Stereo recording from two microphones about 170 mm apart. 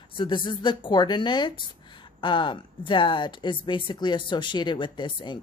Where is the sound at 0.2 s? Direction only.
30° left (ahead or behind).